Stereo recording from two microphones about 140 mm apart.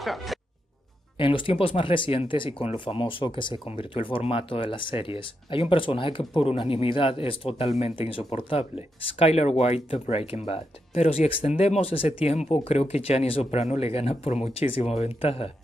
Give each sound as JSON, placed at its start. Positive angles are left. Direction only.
{"t": 0.0, "sound": "speech", "side_deg": 0}
{"t": 1.1, "sound": "speech", "side_deg": 40}